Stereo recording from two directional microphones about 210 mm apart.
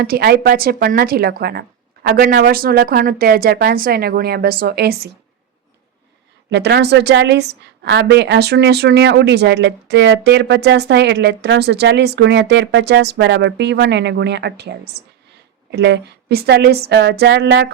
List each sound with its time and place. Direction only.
0.0 s a woman's voice: 45° right (ahead or behind)
6.5 s a woman's voice: 55° right (ahead or behind)